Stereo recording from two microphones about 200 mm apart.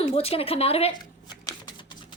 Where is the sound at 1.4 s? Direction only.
20° left (ahead or behind).